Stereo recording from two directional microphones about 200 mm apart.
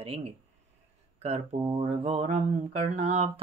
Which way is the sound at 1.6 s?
25° right (ahead or behind).